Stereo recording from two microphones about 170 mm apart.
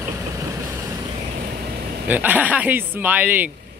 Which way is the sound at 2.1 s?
10° right (ahead or behind).